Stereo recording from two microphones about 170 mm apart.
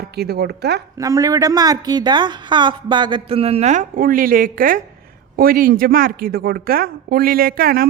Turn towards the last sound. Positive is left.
turn(degrees=-60)  # may be behind; listen again after turning